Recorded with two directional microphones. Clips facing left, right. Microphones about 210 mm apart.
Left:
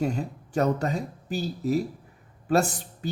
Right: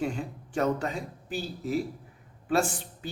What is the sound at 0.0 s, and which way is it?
Speech, 40° left (ahead or behind).